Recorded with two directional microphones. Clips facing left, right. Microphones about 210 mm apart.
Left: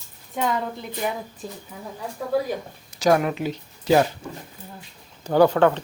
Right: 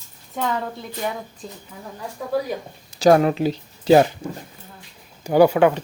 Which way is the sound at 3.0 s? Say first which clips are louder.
Right 5 dB; 30° right (ahead or behind).